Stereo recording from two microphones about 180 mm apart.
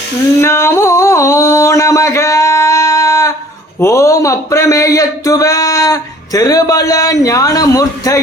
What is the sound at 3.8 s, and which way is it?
Speech, 15° left (ahead or behind).